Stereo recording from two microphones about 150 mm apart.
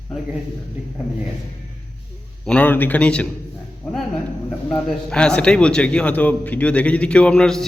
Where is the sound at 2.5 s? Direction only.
10° left (ahead or behind).